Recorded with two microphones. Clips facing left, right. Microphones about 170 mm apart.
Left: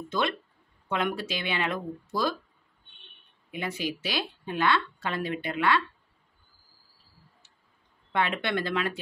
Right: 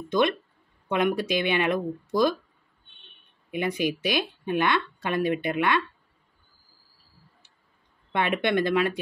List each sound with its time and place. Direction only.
0.1 s speech: 15° right (ahead or behind)
3.5 s speech: 15° right (ahead or behind)
8.1 s speech: 15° right (ahead or behind)